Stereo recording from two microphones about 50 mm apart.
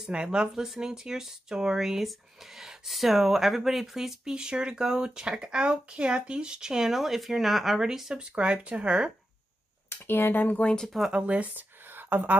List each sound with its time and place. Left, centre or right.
0.1 s speech: centre
4.2 s speech: centre
8.2 s speech: right
9.8 s speech: left
10.9 s speech: centre
11.1 s speech: right
11.9 s a sound: right